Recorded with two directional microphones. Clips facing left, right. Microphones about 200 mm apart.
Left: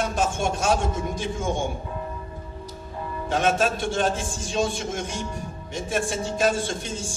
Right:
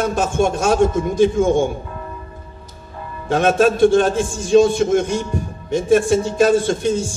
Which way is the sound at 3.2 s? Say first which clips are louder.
Right 8 dB; 60° right (ahead or behind).